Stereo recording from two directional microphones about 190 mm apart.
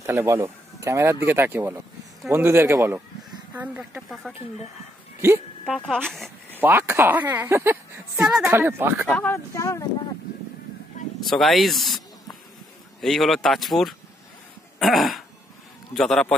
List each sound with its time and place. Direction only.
0.0 s speech: 15° right (ahead or behind)
5.8 s speech: 5° left (ahead or behind)
6.6 s speech: 10° right (ahead or behind)
9.1 s speech: 10° left (ahead or behind)
11.2 s speech: centre (ahead or behind)
13.0 s speech: centre (ahead or behind)
14.8 s throat clearing: centre (ahead or behind)
15.9 s speech: 5° left (ahead or behind)